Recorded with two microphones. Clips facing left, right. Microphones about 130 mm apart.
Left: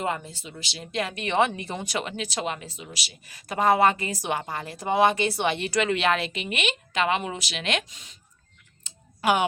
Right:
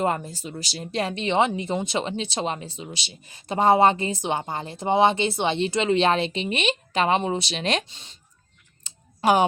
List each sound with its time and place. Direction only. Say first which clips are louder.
0.0 s speech: right 5 dB; 40° right (ahead or behind)
8.8 s tick: right 4 dB; 35° right (ahead or behind)